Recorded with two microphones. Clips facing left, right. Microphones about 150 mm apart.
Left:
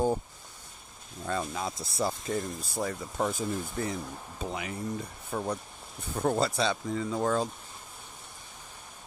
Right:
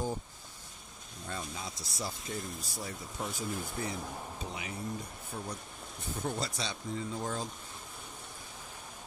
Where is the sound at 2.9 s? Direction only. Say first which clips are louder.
Left 7 dB; 55° left (ahead or behind).